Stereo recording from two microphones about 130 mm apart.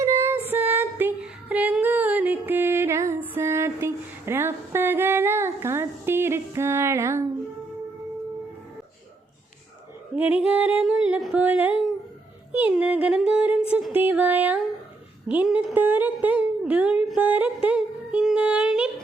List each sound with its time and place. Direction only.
0.0 s female singing: 20° right (ahead or behind)
10.2 s singing: 10° right (ahead or behind)
12.5 s music: 10° right (ahead or behind)
12.7 s humming: 10° right (ahead or behind)
15.4 s music: 10° right (ahead or behind)